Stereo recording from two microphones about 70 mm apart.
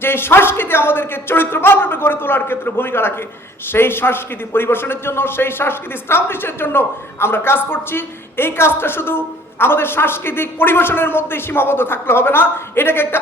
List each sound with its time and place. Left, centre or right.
0.0 s a man's voice: left